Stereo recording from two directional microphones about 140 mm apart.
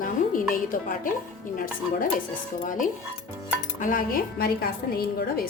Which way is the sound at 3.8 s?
80° left.